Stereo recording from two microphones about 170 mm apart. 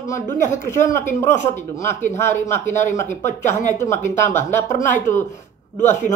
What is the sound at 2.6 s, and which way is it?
Speech, 45° left (ahead or behind).